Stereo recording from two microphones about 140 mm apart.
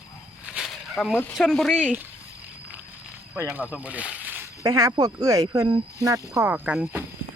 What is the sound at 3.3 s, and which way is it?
Speech, 15° right (ahead or behind).